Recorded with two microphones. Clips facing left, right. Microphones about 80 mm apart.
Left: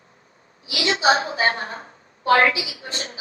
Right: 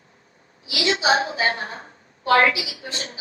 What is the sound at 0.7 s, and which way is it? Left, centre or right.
A woman's voice, left.